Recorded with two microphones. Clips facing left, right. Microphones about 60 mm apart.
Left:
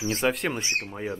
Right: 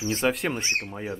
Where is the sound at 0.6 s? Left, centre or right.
Right.